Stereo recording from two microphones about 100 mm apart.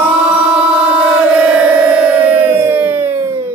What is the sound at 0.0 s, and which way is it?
Music, 15° right (ahead or behind).